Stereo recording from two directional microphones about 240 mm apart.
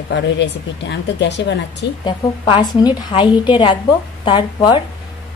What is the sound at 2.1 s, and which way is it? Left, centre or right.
A woman's voice, centre.